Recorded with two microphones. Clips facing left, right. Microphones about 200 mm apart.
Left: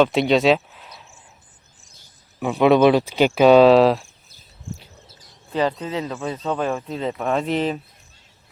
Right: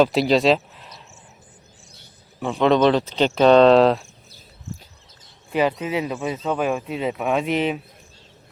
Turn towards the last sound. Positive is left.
turn(degrees=0)  # may be behind; listen again after turning